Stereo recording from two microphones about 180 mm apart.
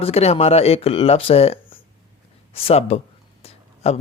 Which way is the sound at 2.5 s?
35° left (ahead or behind).